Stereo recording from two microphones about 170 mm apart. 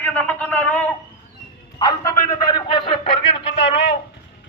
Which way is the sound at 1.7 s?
25° left (ahead or behind).